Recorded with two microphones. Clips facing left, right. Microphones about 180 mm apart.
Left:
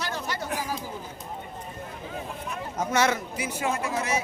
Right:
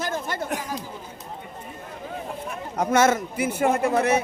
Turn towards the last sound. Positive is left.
turn(degrees=-60)  # may be behind; listen again after turning